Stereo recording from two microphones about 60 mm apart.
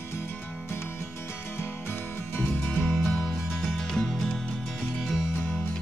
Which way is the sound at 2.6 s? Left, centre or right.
Centre.